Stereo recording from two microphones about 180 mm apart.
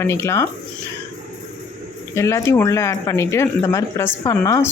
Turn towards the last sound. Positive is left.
turn(degrees=15)  # may be behind; listen again after turning